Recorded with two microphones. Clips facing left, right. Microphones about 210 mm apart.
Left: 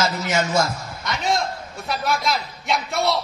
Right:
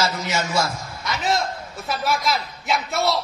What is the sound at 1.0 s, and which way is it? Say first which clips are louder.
A man's voice: even; centre (ahead or behind).